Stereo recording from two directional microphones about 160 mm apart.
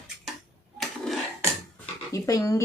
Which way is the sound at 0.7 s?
Centre (ahead or behind).